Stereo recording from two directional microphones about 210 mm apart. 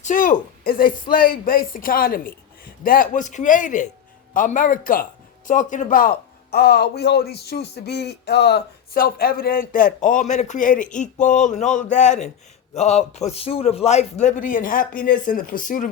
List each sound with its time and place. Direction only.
0.0 s a man's voice: 40° left (ahead or behind)